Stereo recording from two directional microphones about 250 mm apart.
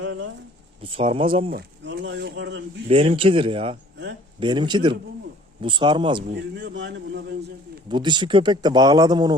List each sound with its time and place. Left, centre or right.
0.0 s a sound: right
0.8 s speech: right
1.5 s a sound: right
2.9 s speech: right
6.3 s a man's voice: right
7.9 s speech: centre